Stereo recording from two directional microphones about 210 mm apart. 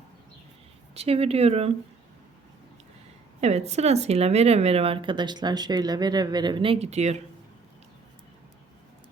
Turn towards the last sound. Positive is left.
turn(degrees=-30)  # may be behind; listen again after turning